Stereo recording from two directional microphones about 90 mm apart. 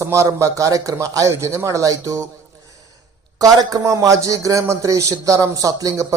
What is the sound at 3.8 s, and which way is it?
A man's voice, 35° right (ahead or behind).